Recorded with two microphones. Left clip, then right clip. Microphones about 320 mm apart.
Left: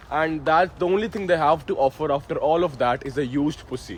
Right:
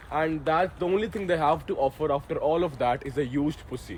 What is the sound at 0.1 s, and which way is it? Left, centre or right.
Speech, left.